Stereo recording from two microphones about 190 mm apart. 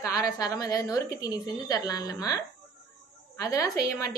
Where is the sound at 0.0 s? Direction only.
20° left (ahead or behind).